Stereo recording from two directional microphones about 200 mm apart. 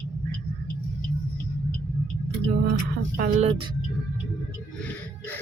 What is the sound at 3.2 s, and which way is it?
Speech, 30° right (ahead or behind).